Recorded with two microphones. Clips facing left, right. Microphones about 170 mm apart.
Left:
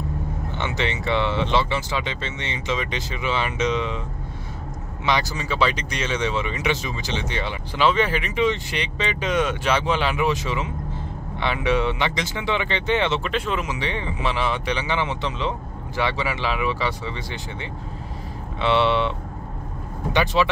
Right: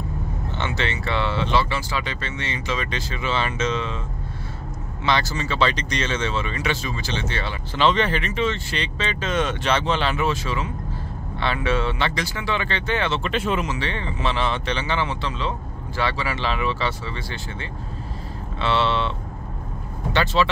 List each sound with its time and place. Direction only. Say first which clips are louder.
0.5 s speech: even; 15° left (ahead or behind)
5.0 s speech: right 1 dB; 15° left (ahead or behind)
13.2 s speech: right 2 dB; centre (ahead or behind)
13.7 s speech: even; 15° left (ahead or behind)